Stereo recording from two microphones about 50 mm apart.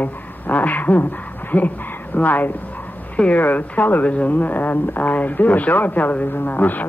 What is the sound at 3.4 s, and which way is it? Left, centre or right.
Speech, left.